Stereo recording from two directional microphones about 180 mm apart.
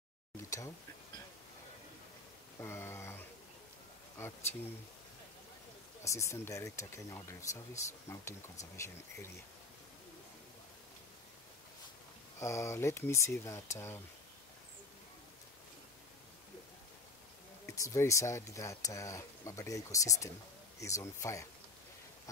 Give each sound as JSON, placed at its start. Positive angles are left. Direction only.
{"t": 0.4, "sound": "a sound", "side_deg": 15}
{"t": 2.6, "sound": "a sound", "side_deg": 15}
{"t": 4.2, "sound": "speech", "side_deg": 15}
{"t": 6.0, "sound": "speech", "side_deg": 15}
{"t": 12.4, "sound": "speech", "side_deg": 15}
{"t": 17.6, "sound": "speech", "side_deg": 15}